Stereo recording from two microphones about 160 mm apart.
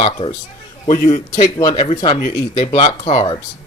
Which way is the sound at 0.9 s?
50° left (ahead or behind).